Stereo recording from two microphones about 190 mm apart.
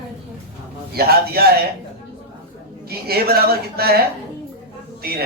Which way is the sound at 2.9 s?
55° right (ahead or behind).